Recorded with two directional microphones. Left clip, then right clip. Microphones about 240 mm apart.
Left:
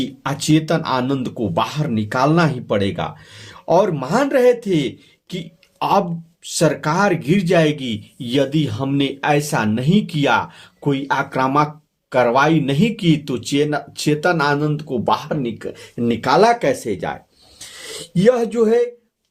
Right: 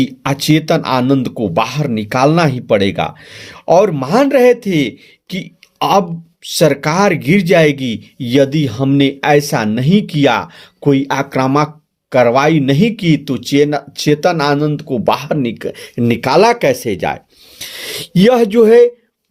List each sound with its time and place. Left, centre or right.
0.0 s speech: right